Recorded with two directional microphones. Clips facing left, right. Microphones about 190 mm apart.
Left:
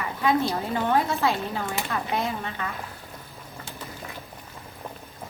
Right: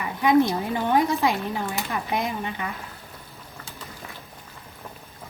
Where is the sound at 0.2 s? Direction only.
15° right (ahead or behind).